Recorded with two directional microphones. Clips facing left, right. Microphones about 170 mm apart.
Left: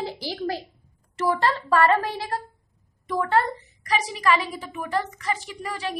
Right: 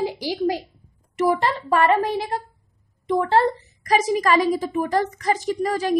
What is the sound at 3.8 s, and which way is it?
A woman's voice, 45° right (ahead or behind).